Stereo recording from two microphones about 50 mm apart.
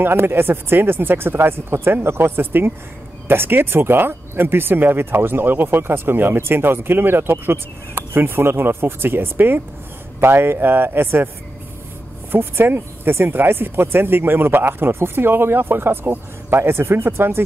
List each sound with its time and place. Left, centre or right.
0.0 s speech: right
12.3 s speech: right